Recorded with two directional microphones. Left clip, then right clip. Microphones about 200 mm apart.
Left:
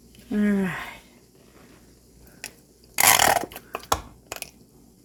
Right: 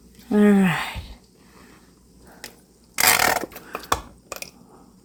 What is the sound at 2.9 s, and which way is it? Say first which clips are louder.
Burping: even; 10° left (ahead or behind).